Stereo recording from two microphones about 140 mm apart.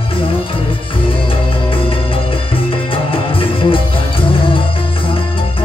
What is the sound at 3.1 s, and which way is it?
Music, 40° left (ahead or behind).